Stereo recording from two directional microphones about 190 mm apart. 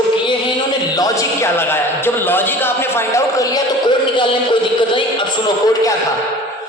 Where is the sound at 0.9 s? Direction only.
15° left (ahead or behind).